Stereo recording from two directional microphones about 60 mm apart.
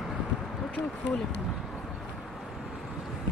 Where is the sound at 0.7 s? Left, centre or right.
Left.